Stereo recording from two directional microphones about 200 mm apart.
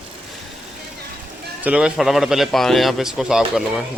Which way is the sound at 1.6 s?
5° right (ahead or behind).